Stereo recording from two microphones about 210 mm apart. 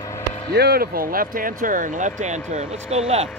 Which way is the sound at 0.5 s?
50° right (ahead or behind).